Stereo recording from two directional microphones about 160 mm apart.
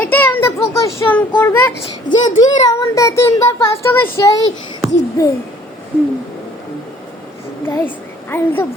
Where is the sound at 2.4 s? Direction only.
25° left (ahead or behind).